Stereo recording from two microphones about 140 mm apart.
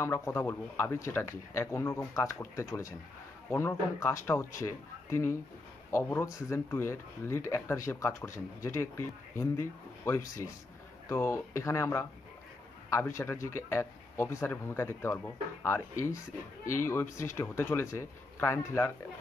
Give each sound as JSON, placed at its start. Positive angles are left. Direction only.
{"t": 0.0, "sound": "speech", "side_deg": 20}